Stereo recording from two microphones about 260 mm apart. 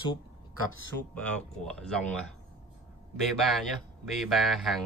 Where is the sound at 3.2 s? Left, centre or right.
Centre.